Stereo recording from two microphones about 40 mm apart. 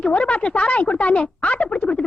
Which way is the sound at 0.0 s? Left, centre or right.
Left.